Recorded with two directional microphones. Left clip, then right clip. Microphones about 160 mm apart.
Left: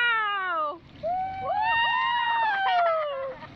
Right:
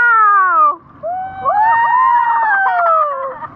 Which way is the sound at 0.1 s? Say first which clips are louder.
Right 16 dB; 5° left (ahead or behind).